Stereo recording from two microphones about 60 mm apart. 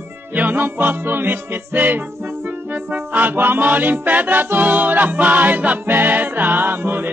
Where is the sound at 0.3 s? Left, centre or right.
Right.